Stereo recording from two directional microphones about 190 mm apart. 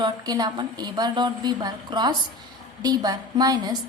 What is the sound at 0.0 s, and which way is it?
A woman's voice, 20° right (ahead or behind).